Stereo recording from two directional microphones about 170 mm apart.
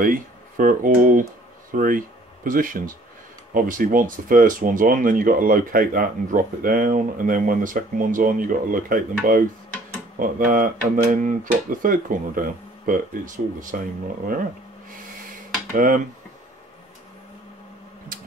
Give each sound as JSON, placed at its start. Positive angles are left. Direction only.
{"t": 0.0, "sound": "speech", "side_deg": -55}
{"t": 15.7, "sound": "speech", "side_deg": -50}